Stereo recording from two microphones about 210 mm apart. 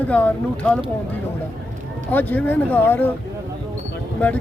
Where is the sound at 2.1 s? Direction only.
10° left (ahead or behind).